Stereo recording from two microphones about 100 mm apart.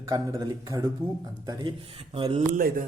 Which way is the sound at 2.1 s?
65° right (ahead or behind).